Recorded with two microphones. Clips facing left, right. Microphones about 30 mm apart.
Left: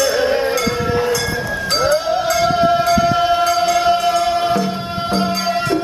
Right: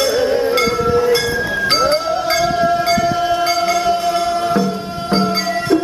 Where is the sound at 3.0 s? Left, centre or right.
Centre.